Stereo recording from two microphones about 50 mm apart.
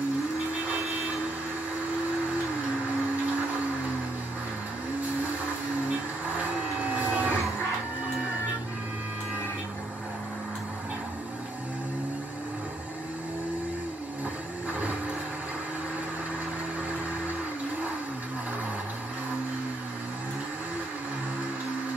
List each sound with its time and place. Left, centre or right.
6.9 s printer: right